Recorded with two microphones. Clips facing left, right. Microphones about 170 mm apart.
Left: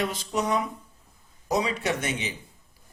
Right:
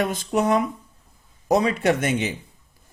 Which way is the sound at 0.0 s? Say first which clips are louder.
Right 6 dB; 50° right (ahead or behind).